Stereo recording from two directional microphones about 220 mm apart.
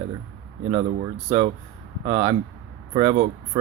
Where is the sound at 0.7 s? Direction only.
30° right (ahead or behind).